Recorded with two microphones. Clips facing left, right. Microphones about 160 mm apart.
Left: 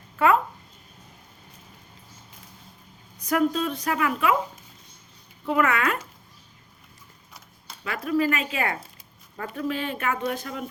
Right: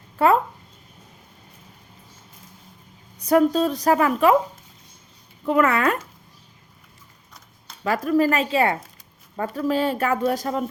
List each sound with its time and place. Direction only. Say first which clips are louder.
3.2 s speech: right 6 dB; 35° right (ahead or behind)
5.5 s speech: right 4 dB; 40° right (ahead or behind)
7.9 s speech: right 5 dB; 40° right (ahead or behind)